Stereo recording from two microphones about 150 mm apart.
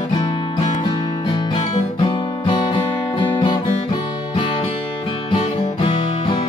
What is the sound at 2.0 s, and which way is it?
Music, 30° left (ahead or behind).